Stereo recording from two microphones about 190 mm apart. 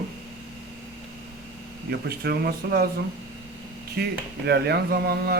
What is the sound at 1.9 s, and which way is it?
Speech, 55° right (ahead or behind).